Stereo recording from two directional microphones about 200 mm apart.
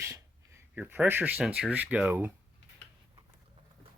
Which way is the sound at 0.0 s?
15° right (ahead or behind).